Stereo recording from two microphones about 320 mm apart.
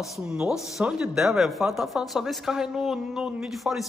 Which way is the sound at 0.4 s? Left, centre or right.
Centre.